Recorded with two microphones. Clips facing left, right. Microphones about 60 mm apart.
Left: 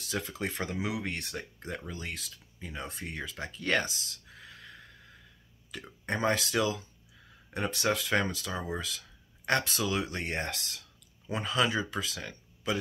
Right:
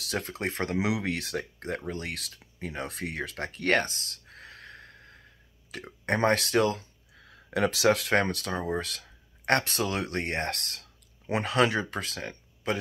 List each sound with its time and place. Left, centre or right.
0.0 s speech: right
0.7 s speech: right
5.7 s speech: right